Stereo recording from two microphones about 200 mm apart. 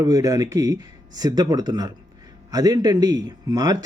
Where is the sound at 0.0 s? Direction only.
20° right (ahead or behind).